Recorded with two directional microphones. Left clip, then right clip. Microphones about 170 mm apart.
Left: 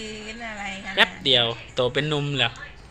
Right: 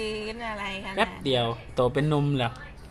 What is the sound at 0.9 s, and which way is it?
Speech, 10° right (ahead or behind).